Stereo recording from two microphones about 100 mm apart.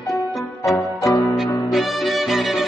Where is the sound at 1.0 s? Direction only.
30° left (ahead or behind).